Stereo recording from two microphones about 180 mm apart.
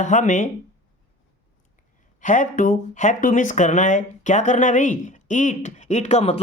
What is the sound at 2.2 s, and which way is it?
Speech, 45° left (ahead or behind).